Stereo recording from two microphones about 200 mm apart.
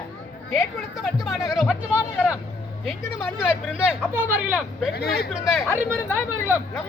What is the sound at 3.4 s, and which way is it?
Speech, 5° right (ahead or behind).